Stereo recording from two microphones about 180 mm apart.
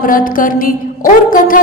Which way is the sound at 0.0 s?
50° left (ahead or behind).